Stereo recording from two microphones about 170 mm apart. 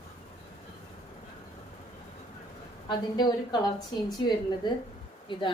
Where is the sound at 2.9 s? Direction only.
25° left (ahead or behind).